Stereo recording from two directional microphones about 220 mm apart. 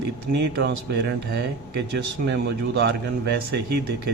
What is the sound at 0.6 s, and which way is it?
Speech, 50° right (ahead or behind).